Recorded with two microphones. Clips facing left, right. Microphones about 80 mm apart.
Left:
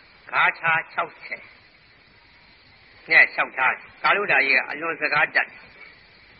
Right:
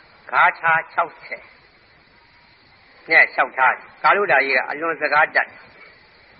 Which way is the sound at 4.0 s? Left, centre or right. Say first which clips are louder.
Right 5 dB; centre.